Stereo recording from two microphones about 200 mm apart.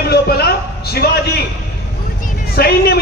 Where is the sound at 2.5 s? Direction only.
50° left (ahead or behind).